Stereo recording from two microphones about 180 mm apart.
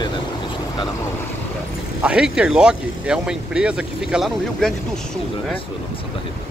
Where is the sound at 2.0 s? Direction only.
5° right (ahead or behind).